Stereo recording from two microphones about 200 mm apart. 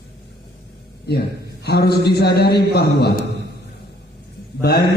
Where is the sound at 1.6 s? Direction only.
55° left (ahead or behind).